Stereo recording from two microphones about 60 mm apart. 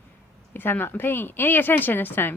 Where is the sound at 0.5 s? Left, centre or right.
Left.